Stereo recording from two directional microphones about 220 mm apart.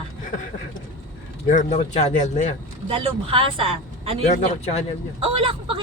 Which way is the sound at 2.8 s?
25° right (ahead or behind).